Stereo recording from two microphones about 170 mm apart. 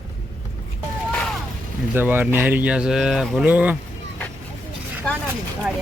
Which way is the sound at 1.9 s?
10° right (ahead or behind).